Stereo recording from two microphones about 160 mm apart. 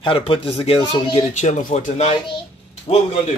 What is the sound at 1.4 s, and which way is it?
Speech, 50° left (ahead or behind).